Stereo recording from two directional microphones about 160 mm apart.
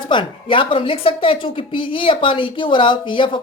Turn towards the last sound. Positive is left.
turn(degrees=30)  # may be behind; listen again after turning